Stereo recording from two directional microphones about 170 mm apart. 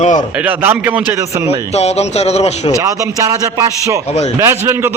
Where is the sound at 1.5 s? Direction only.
40° left (ahead or behind).